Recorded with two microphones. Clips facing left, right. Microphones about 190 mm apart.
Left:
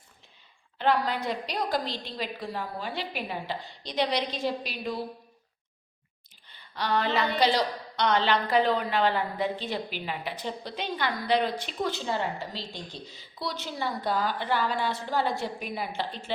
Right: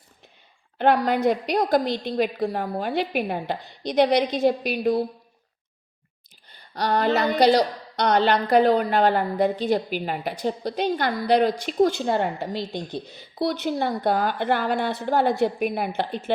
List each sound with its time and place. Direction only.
0.8 s a woman's voice: 55° right (ahead or behind)
6.5 s a woman's voice: 40° right (ahead or behind)